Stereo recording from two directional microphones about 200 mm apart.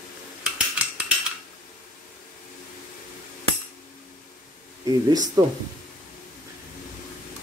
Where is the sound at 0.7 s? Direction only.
5° right (ahead or behind).